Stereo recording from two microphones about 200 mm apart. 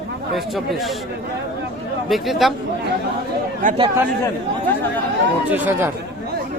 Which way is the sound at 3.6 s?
30° right (ahead or behind).